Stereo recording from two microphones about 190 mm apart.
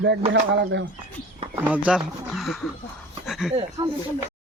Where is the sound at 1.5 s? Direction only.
10° right (ahead or behind).